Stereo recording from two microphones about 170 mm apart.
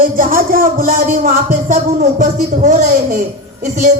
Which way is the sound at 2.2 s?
45° right (ahead or behind).